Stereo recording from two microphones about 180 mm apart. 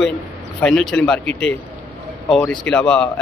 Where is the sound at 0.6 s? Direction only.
5° left (ahead or behind).